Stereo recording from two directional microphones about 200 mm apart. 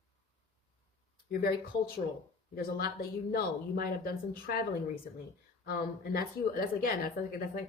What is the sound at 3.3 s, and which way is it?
Speech, 50° left (ahead or behind).